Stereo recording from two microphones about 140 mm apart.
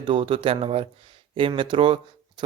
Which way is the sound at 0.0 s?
40° right (ahead or behind).